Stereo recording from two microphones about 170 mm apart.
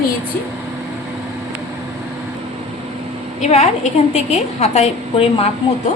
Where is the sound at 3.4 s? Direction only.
40° left (ahead or behind).